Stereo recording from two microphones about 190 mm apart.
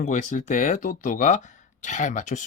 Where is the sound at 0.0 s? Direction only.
40° left (ahead or behind).